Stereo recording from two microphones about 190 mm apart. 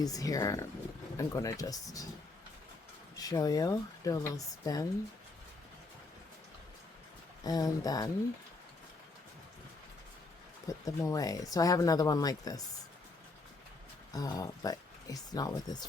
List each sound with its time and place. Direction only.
0.0 s speech: 20° left (ahead or behind)
3.2 s speech: 20° left (ahead or behind)
7.4 s speech: 20° left (ahead or behind)
10.7 s speech: 20° left (ahead or behind)
14.1 s speech: 20° left (ahead or behind)